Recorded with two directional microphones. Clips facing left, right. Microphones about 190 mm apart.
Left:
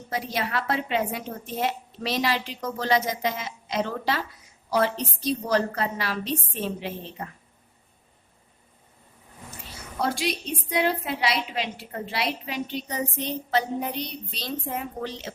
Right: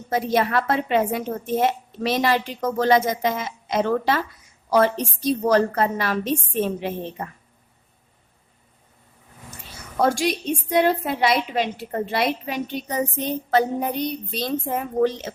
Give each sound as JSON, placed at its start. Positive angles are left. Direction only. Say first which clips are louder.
{"t": 0.1, "sound": "a woman's voice", "louder": "right 8 dB", "side_deg": -50}
{"t": 10.0, "sound": "a woman's voice", "louder": "right 6 dB", "side_deg": -45}